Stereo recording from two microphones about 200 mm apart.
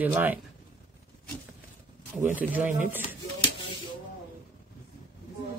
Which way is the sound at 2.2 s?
10° right (ahead or behind).